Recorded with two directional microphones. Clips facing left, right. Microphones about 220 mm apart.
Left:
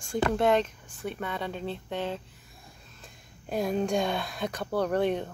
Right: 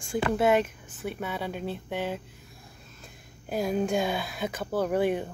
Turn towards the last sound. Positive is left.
turn(degrees=-5)  # may be behind; listen again after turning